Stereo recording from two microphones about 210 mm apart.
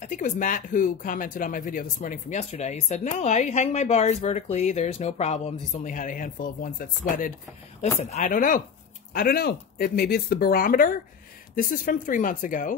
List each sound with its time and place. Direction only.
0.0 s speech: 35° left (ahead or behind)